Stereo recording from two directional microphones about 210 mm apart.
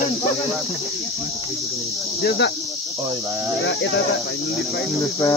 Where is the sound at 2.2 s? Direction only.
50° left (ahead or behind).